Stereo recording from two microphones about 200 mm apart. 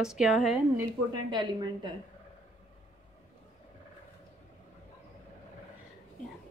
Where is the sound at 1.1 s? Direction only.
20° right (ahead or behind).